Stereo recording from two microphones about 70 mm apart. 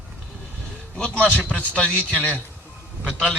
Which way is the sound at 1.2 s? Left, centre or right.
Centre.